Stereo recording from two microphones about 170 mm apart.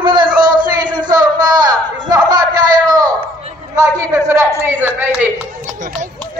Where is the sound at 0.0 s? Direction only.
25° right (ahead or behind).